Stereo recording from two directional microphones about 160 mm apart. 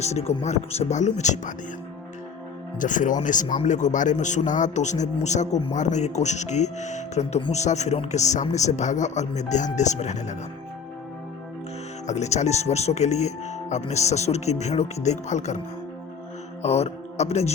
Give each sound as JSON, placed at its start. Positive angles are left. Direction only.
{"t": 0.0, "sound": "speech", "side_deg": 40}
{"t": 2.7, "sound": "speech", "side_deg": 55}
{"t": 12.0, "sound": "speech", "side_deg": 45}
{"t": 16.6, "sound": "speech", "side_deg": 40}